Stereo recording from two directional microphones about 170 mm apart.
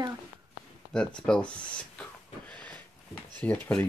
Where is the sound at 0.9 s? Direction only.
5° left (ahead or behind).